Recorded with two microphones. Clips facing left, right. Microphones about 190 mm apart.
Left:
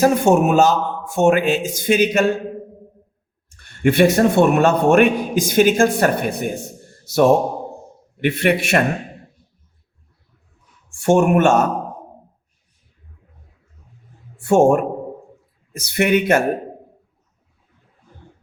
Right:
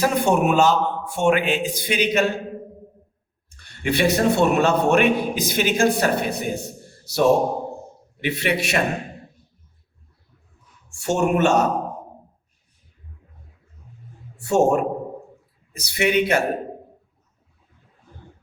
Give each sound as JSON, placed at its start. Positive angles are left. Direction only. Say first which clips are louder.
{"t": 0.0, "sound": "a man's voice", "louder": "left 5 dB", "side_deg": 45}
{"t": 3.6, "sound": "a man's voice", "louder": "left 7 dB", "side_deg": 50}
{"t": 8.2, "sound": "a man's voice", "louder": "left 5 dB", "side_deg": 55}
{"t": 11.0, "sound": "a man's voice", "louder": "left 5 dB", "side_deg": 55}
{"t": 14.3, "sound": "a man's voice", "louder": "left 4 dB", "side_deg": 55}